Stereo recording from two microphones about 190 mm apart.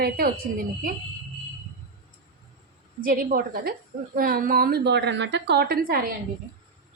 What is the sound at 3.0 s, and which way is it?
A woman's voice, 45° right (ahead or behind).